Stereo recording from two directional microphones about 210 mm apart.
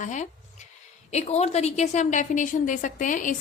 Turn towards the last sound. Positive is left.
turn(degrees=40)  # may be behind; listen again after turning